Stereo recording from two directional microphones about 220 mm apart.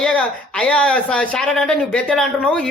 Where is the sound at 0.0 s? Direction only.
5° left (ahead or behind).